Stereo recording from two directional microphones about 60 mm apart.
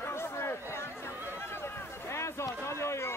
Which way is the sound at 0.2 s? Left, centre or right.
Left.